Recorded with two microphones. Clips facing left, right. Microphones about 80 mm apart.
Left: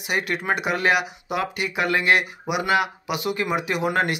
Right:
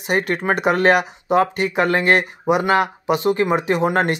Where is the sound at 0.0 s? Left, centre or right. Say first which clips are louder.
Right 5 dB; right.